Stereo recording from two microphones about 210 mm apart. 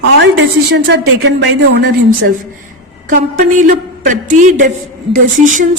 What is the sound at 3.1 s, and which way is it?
A woman's voice, 40° right (ahead or behind).